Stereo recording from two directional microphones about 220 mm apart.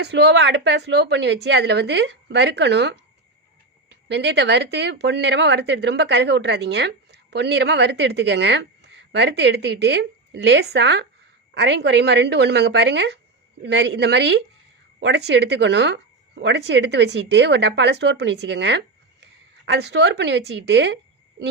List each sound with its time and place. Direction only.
0.0 s speech: 50° right (ahead or behind)
4.1 s speech: 50° right (ahead or behind)